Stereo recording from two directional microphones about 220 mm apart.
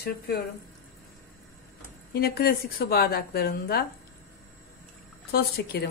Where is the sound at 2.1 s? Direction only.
45° left (ahead or behind).